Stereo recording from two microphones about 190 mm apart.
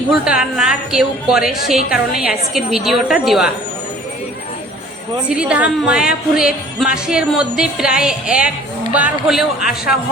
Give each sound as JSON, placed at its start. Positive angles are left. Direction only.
{"t": 0.1, "sound": "speech", "side_deg": -5}
{"t": 5.3, "sound": "speech", "side_deg": -5}